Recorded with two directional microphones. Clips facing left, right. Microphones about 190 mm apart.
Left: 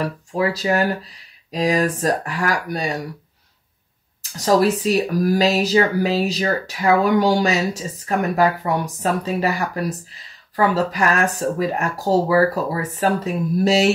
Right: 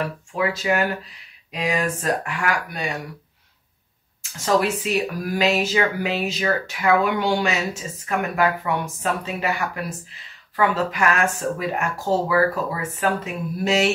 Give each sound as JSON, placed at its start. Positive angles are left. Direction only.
{"t": 0.0, "sound": "speech", "side_deg": 35}
{"t": 4.2, "sound": "speech", "side_deg": 35}